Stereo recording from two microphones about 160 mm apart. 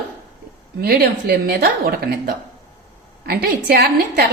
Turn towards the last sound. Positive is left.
turn(degrees=-75)  # may be behind; listen again after turning